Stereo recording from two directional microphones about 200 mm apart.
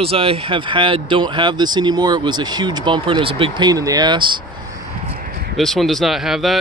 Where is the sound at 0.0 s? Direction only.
30° right (ahead or behind).